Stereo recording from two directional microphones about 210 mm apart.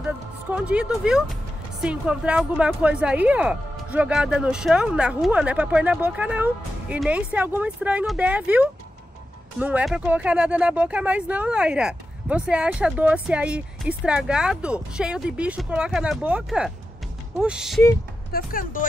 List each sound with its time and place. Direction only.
0.0 s vehicle: 5° right (ahead or behind)
1.8 s speech: 5° right (ahead or behind)
18.3 s speech: 40° left (ahead or behind)